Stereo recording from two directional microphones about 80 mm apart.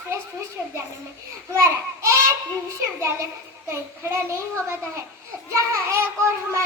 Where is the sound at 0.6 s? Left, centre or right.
Centre.